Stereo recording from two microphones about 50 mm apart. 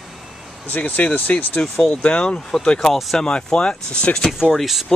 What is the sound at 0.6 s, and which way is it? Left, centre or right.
Speech, left.